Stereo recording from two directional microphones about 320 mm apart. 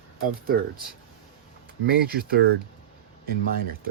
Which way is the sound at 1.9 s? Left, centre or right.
Right.